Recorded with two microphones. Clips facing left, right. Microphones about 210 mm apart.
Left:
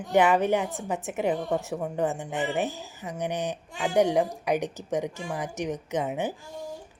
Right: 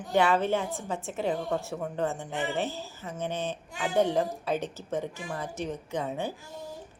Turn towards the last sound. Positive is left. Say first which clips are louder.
# left 3 dB
turn(degrees=20)  # may be behind; listen again after turning